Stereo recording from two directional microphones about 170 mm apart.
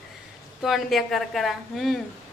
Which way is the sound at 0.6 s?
Centre (ahead or behind).